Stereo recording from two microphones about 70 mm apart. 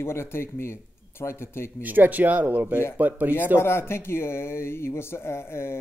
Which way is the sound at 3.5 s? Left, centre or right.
Left.